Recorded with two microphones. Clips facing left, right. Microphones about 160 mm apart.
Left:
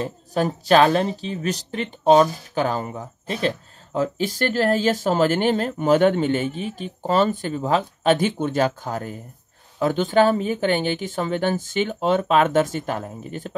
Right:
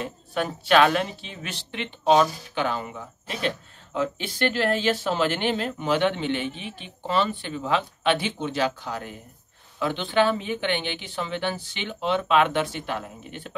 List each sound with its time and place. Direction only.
0.0 s speech: 35° left (ahead or behind)